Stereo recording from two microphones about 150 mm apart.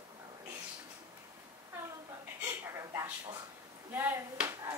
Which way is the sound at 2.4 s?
15° right (ahead or behind).